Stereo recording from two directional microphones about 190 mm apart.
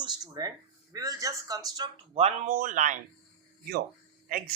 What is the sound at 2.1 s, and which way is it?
Speech, 35° right (ahead or behind).